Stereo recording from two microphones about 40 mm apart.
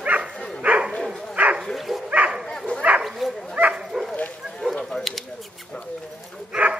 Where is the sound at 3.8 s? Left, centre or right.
Centre.